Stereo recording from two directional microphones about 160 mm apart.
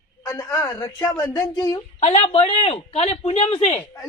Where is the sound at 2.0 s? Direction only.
40° left (ahead or behind).